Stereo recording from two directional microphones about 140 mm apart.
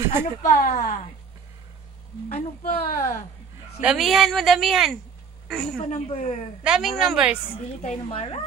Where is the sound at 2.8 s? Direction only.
90° left.